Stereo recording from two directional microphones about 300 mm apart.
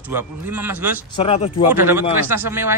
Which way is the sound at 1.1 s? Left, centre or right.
Centre.